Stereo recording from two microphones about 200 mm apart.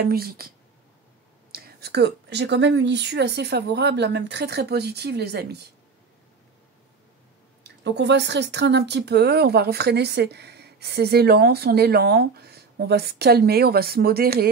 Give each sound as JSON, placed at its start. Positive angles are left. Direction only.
{"t": 0.0, "sound": "speech", "side_deg": -50}
{"t": 1.5, "sound": "speech", "side_deg": -50}
{"t": 7.6, "sound": "speech", "side_deg": -60}